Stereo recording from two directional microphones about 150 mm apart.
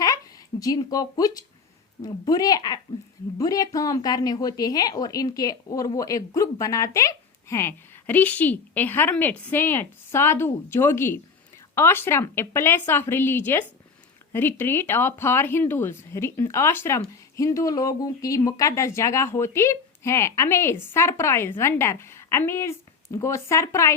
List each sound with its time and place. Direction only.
0.6 s a woman's voice: 25° left (ahead or behind)